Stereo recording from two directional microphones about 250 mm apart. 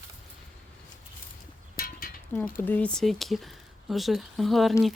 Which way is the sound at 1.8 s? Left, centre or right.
Left.